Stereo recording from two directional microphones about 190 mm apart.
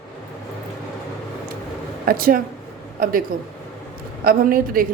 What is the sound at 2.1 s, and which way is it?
A woman's voice, 50° right (ahead or behind).